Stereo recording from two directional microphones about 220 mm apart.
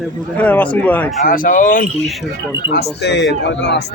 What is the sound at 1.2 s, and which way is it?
Speech, 40° left (ahead or behind).